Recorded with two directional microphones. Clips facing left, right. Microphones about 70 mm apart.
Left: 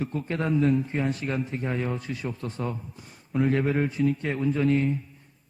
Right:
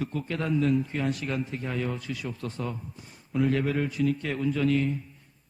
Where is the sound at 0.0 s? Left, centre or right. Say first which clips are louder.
Left 2 dB; left.